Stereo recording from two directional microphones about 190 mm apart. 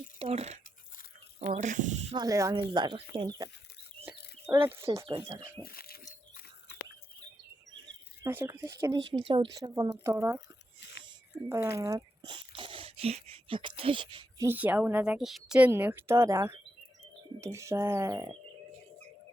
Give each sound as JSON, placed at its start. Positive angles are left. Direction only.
{"t": 0.2, "sound": "speech", "side_deg": -35}
{"t": 2.1, "sound": "speech", "side_deg": -15}
{"t": 4.1, "sound": "bird", "side_deg": -5}
{"t": 4.8, "sound": "speech", "side_deg": -15}
{"t": 5.6, "sound": "a sound", "side_deg": 55}
{"t": 8.2, "sound": "a woman's voice", "side_deg": -15}
{"t": 9.1, "sound": "speech", "side_deg": -25}
{"t": 11.4, "sound": "a woman's voice", "side_deg": -15}
{"t": 14.4, "sound": "a woman's voice", "side_deg": -10}